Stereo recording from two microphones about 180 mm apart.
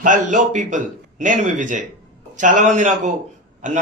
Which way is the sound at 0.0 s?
45° right (ahead or behind).